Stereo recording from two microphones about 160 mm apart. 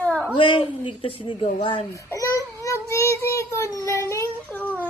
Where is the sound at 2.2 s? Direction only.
20° left (ahead or behind).